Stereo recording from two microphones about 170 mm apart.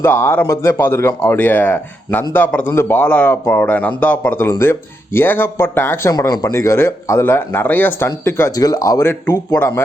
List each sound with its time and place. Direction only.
0.0 s a man's voice: 10° left (ahead or behind)